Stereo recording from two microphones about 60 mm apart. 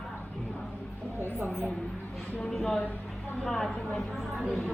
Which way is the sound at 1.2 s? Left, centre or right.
Right.